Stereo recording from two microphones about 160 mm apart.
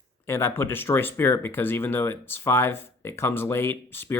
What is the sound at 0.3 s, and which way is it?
Speech, 15° left (ahead or behind).